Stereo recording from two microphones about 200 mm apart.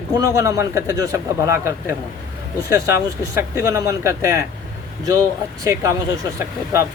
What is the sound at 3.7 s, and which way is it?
Speech, 15° right (ahead or behind).